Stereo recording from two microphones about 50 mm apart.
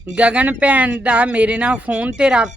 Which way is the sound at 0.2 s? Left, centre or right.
Right.